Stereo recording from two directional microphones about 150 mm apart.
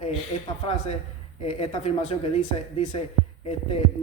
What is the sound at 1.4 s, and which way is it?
Speech, 40° left (ahead or behind).